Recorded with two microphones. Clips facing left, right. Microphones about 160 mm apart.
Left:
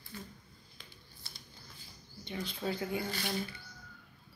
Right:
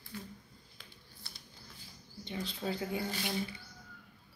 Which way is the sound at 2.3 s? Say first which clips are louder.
Left 1 dB; 30° right (ahead or behind).